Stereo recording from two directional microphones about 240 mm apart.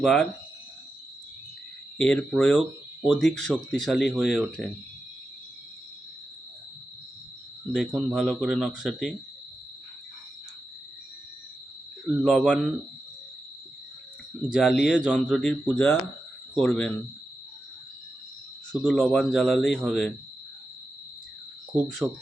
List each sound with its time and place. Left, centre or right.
0.0 s speech: centre
2.0 s speech: centre
7.7 s speech: centre
12.2 s speech: centre
14.5 s speech: centre
18.9 s speech: centre
22.0 s speech: centre